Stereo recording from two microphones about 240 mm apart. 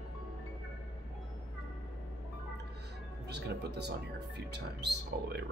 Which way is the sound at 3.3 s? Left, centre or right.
Right.